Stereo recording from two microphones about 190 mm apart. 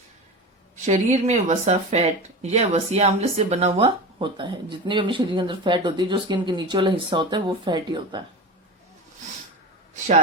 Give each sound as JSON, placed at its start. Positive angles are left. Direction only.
{"t": 0.9, "sound": "speech", "side_deg": -40}